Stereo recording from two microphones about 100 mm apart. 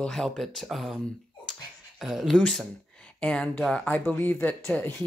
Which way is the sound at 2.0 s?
Centre (ahead or behind).